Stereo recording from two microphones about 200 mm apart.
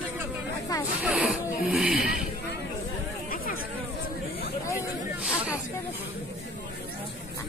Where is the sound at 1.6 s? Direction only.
Centre (ahead or behind).